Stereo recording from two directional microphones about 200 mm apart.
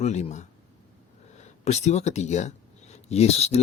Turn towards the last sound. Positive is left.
turn(degrees=30)  # may be behind; listen again after turning